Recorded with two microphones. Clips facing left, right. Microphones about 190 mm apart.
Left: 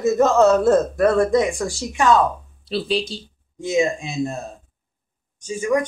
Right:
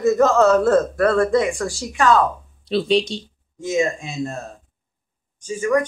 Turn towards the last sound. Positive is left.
turn(degrees=15)  # may be behind; listen again after turning